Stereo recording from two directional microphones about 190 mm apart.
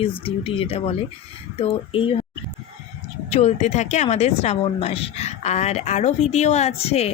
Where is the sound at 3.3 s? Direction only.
35° left (ahead or behind).